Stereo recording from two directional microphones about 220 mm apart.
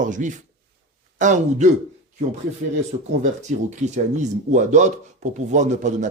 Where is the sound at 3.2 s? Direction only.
30° right (ahead or behind).